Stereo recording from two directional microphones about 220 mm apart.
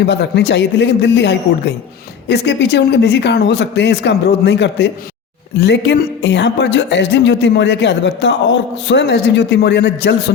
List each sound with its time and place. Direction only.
0.0 s a woman's voice: 50° left (ahead or behind)